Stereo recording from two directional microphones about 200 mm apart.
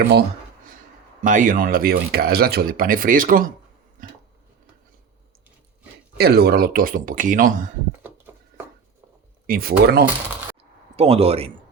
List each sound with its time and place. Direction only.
0.0 s speech: 55° right (ahead or behind)
1.2 s speech: 40° right (ahead or behind)
6.1 s speech: 50° right (ahead or behind)
9.5 s speech: 50° right (ahead or behind)
10.9 s speech: 30° right (ahead or behind)